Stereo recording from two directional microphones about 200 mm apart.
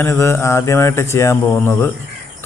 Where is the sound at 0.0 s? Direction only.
10° left (ahead or behind).